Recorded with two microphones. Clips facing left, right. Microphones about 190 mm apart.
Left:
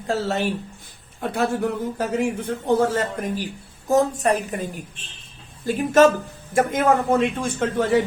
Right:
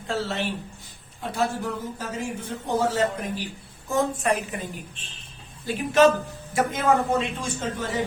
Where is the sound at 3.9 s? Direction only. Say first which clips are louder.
Left 5 dB; 40° left (ahead or behind).